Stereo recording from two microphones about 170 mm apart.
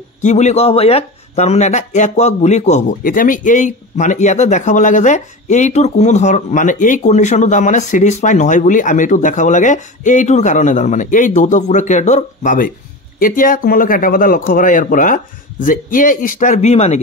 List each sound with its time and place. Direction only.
0.2 s speech: 45° left (ahead or behind)